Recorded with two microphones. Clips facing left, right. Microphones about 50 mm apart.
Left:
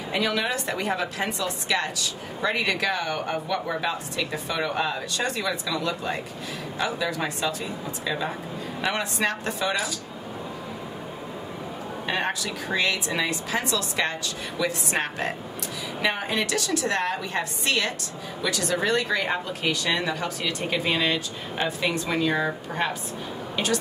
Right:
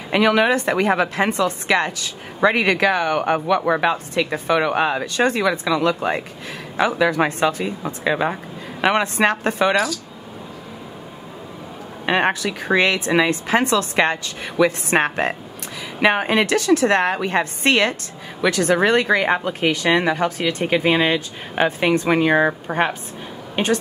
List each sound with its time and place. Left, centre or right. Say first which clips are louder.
0.1 s speech: right 10 dB; right
3.2 s speech: right 9 dB; right
6.8 s speech: right 10 dB; right
7.2 s a woman's voice: right 8 dB; right
12.1 s a woman's voice: right 9 dB; right